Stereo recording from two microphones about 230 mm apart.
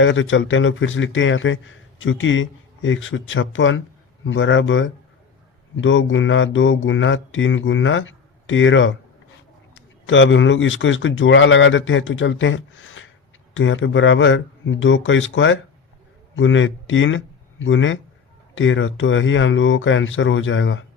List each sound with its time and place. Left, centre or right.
0.0 s speech: left